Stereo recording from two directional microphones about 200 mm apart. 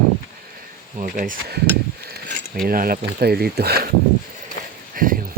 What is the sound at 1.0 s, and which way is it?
Speech, 40° right (ahead or behind).